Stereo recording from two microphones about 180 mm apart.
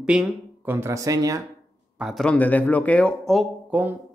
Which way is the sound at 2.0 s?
Centre (ahead or behind).